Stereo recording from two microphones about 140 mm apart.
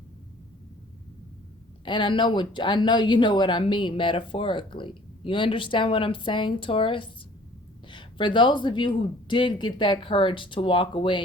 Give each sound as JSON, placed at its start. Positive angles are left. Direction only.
{"t": 1.8, "sound": "speech", "side_deg": 35}